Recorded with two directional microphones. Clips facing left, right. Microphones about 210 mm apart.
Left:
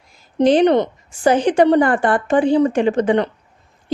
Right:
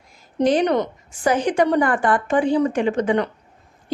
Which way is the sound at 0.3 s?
30° left (ahead or behind).